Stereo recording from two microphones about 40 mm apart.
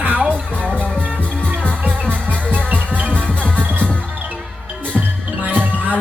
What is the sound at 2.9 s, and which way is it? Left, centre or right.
Music, right.